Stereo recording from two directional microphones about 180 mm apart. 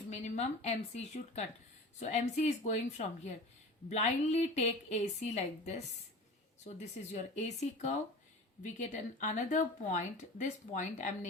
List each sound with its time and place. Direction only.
0.1 s a woman's voice: 40° left (ahead or behind)
7.1 s a woman's voice: 40° left (ahead or behind)